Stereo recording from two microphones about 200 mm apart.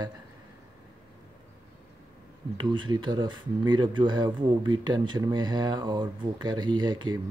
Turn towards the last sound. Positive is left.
turn(degrees=-20)  # may be behind; listen again after turning